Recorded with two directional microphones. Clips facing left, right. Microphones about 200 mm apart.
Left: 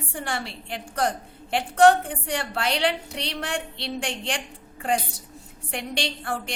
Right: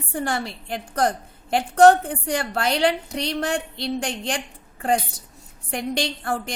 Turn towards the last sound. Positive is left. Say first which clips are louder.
# right 3 dB
turn(degrees=-45)  # may be behind; listen again after turning